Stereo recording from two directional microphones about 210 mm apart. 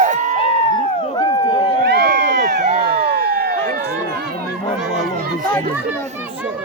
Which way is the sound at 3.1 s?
50° right (ahead or behind).